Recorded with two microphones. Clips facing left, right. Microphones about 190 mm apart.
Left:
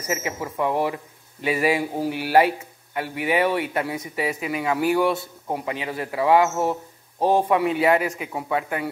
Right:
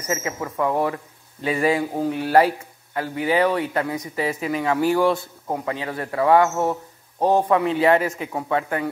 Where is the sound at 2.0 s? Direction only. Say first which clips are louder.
Right 2 dB; 25° right (ahead or behind).